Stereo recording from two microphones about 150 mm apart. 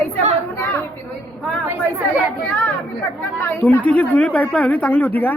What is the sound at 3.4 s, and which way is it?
A woman's voice, 15° left (ahead or behind).